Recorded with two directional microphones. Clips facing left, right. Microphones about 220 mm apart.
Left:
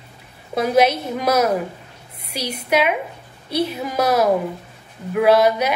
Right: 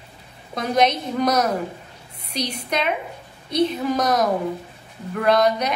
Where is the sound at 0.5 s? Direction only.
5° left (ahead or behind).